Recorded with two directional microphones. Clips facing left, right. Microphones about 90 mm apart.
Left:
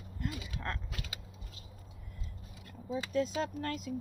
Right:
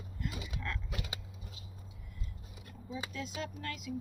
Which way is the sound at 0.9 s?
20° right (ahead or behind).